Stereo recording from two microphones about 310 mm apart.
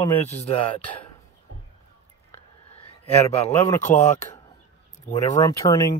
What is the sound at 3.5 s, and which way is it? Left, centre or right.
Speech, centre.